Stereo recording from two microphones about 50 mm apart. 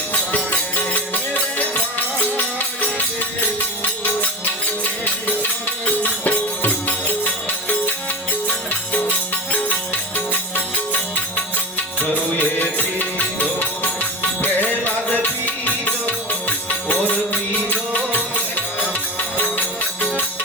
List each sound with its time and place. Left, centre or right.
0.1 s music: left
5.4 s music: left
8.4 s music: left
11.9 s music: left